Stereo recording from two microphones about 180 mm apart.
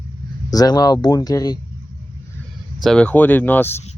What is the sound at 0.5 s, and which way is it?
Speech, 20° left (ahead or behind).